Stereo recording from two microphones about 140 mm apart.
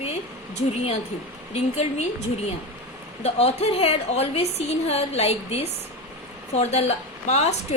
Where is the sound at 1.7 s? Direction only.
50° left (ahead or behind).